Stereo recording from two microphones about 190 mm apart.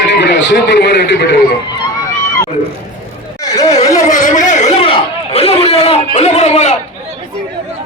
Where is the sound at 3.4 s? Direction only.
20° left (ahead or behind).